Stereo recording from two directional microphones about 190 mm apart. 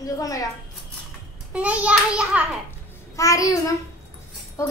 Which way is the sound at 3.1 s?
15° left (ahead or behind).